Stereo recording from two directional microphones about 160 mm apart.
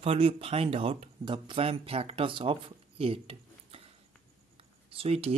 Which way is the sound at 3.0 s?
35° right (ahead or behind).